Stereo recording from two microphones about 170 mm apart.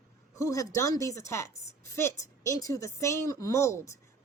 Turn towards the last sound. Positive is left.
turn(degrees=15)  # may be behind; listen again after turning